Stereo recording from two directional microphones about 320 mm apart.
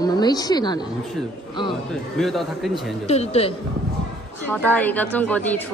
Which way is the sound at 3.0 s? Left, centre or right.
Centre.